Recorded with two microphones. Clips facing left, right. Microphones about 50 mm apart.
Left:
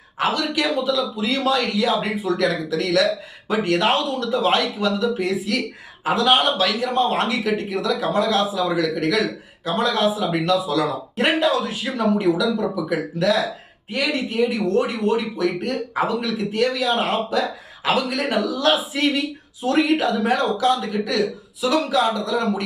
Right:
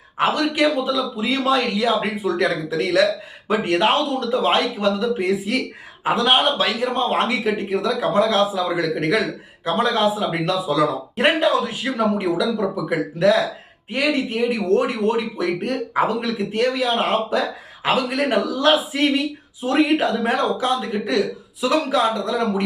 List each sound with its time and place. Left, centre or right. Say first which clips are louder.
0.2 s speech: right 3 dB; right